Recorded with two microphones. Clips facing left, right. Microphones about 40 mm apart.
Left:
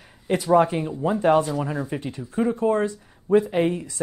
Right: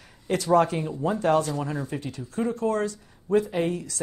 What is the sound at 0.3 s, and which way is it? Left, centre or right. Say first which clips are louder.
Speech: left 3 dB; centre.